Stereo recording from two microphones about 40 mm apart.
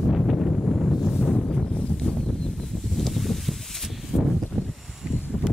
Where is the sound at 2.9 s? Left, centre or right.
Centre.